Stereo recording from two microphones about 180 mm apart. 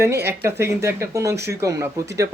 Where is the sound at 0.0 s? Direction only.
15° right (ahead or behind).